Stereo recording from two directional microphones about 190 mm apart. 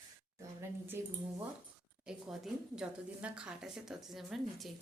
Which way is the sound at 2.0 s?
5° right (ahead or behind).